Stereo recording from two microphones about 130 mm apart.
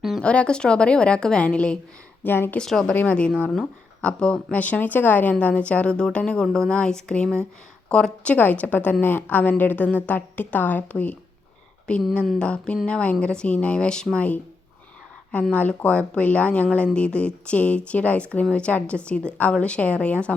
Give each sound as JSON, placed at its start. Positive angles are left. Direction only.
{"t": 0.0, "sound": "speech", "side_deg": 5}
{"t": 2.6, "sound": "speech", "side_deg": 5}